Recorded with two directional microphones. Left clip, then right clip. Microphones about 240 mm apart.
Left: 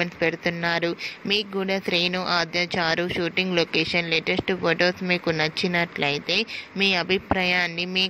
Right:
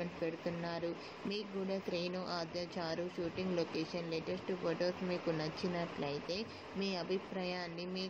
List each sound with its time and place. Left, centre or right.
0.0 s speech: left
2.1 s speech: left
2.5 s speech: left